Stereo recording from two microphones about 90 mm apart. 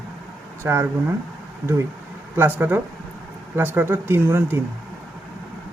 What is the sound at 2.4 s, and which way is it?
A man's voice, 20° right (ahead or behind).